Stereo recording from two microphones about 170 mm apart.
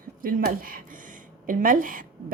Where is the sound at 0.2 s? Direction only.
55° right (ahead or behind).